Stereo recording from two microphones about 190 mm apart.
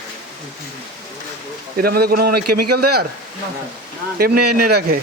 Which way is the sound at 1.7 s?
55° right (ahead or behind).